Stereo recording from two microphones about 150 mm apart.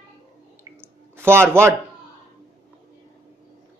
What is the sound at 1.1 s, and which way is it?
Speech, 15° right (ahead or behind).